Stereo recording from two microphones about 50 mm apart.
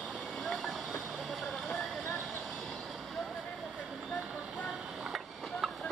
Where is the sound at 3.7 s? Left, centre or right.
Centre.